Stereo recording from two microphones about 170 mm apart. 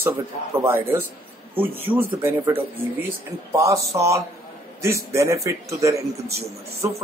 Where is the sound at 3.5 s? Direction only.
20° right (ahead or behind).